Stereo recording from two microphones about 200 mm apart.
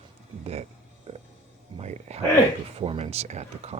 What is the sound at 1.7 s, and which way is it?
Speech, 35° right (ahead or behind).